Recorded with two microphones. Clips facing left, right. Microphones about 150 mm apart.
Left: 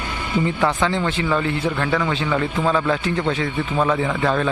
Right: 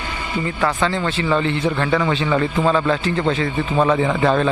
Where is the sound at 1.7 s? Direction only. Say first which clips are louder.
Right 2 dB; centre (ahead or behind).